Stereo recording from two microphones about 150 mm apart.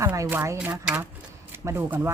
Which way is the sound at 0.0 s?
15° right (ahead or behind).